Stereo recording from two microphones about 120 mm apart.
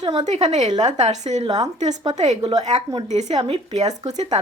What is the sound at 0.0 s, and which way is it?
Speech, 40° right (ahead or behind).